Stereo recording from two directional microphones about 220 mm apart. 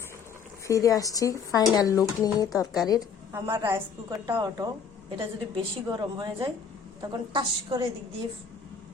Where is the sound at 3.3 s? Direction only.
10° right (ahead or behind).